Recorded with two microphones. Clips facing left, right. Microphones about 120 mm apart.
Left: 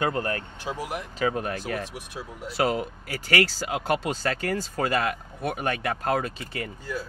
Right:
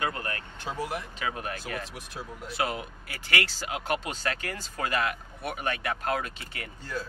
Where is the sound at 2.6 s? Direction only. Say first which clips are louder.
Left 6 dB; 40° left (ahead or behind).